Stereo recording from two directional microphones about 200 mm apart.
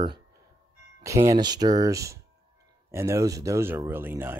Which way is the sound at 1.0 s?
15° right (ahead or behind).